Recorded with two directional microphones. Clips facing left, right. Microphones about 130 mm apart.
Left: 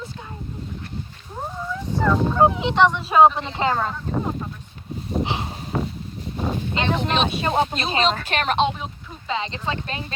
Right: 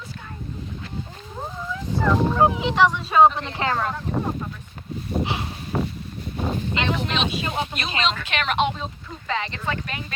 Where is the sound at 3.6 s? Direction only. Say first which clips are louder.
Left 2 dB; 15° left (ahead or behind).